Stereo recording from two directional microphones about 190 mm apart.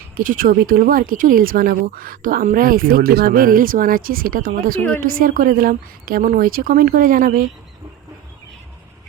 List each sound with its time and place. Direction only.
0.2 s speech: 45° right (ahead or behind)